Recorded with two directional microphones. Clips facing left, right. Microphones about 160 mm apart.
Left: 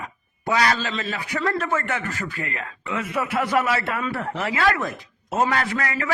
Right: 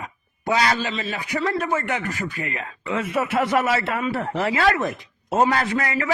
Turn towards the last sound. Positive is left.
turn(degrees=-20)  # may be behind; listen again after turning